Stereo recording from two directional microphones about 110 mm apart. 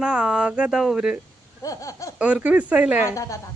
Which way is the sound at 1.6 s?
30° left (ahead or behind).